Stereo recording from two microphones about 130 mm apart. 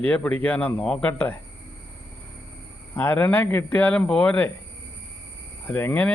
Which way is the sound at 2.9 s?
15° left (ahead or behind).